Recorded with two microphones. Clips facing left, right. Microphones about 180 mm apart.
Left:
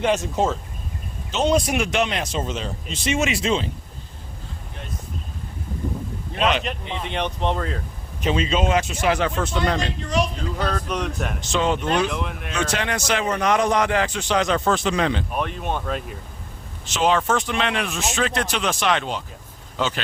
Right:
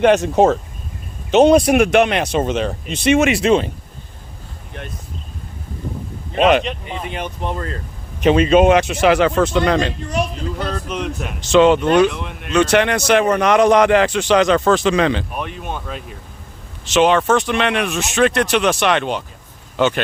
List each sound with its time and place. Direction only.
0.0 s speech: 65° right (ahead or behind)
6.7 s speech: 5° right (ahead or behind)
8.2 s speech: 65° right (ahead or behind); by 9.9 s 90° right
10.8 s speech: 5° right (ahead or behind)
11.3 s a man's voice: 85° right; by 12.1 s 70° right (ahead or behind)
12.1 s speech: centre (ahead or behind)
12.5 s a man's voice: 70° right (ahead or behind); by 15.2 s 90° right
15.4 s speech: centre (ahead or behind)
16.8 s speech: 80° right